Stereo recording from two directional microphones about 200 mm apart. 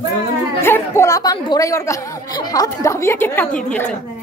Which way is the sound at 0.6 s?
15° left (ahead or behind).